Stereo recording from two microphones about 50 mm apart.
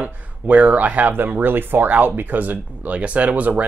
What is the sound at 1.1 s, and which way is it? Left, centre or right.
Speech, right.